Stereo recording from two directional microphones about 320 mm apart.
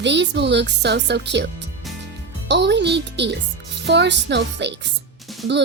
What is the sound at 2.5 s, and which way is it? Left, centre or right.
Speech, right.